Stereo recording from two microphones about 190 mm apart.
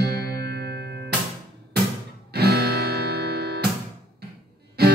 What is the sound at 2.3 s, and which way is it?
Music, 55° right (ahead or behind).